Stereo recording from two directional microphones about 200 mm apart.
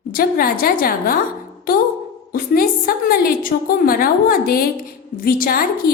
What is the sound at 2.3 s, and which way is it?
A woman's voice, 45° left (ahead or behind).